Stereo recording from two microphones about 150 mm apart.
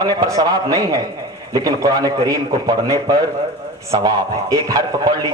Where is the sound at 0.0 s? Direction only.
25° right (ahead or behind).